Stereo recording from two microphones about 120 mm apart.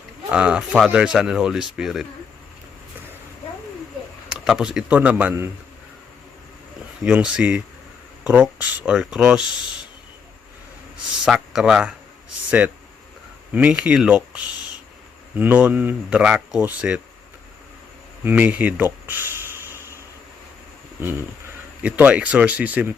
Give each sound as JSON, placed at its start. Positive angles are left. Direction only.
{"t": 0.3, "sound": "speech", "side_deg": -10}
{"t": 4.3, "sound": "speech", "side_deg": -5}
{"t": 7.0, "sound": "speech", "side_deg": -10}
{"t": 11.3, "sound": "speech", "side_deg": -5}
{"t": 18.2, "sound": "speech", "side_deg": -15}
{"t": 21.0, "sound": "speech", "side_deg": -15}